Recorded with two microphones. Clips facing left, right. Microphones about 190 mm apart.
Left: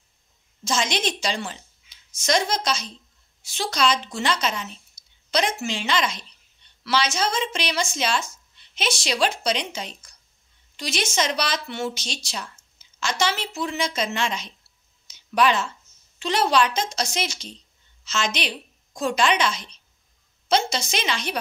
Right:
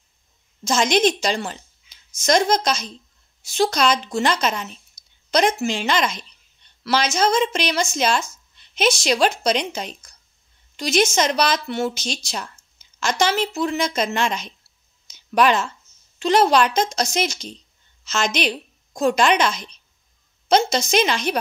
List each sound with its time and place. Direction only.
0.7 s speech: 45° right (ahead or behind)
15.0 s a sound: 45° right (ahead or behind)
16.2 s speech: 45° right (ahead or behind)